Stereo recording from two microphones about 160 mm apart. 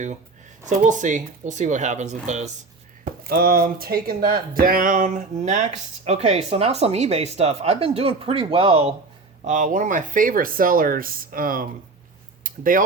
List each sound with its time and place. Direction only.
0.9 s speech: 50° right (ahead or behind)
3.0 s speech: 65° right (ahead or behind); by 8.9 s 35° right (ahead or behind)
9.4 s speech: 50° right (ahead or behind)
12.4 s a sound: 60° right (ahead or behind)